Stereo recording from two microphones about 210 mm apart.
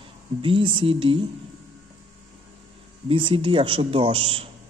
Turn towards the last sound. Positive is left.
turn(degrees=-25)  # may be behind; listen again after turning